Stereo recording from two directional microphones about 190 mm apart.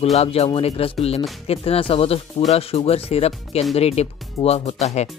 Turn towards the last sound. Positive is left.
turn(degrees=35)  # may be behind; listen again after turning